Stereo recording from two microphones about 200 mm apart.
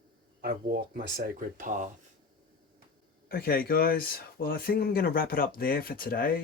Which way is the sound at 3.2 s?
50° left (ahead or behind).